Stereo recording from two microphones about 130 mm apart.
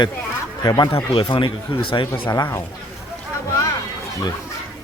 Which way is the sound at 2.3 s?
25° left (ahead or behind).